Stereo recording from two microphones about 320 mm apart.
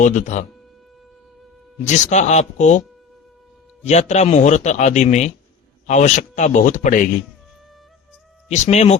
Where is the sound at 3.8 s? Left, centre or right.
Left.